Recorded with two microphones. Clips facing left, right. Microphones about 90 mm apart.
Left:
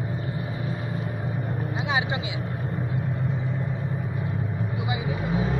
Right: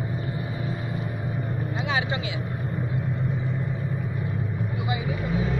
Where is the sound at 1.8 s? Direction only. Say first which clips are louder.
Left 1 dB; 20° left (ahead or behind).